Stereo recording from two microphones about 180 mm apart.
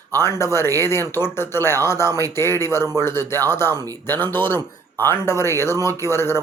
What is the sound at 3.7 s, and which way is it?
Speech, 20° right (ahead or behind).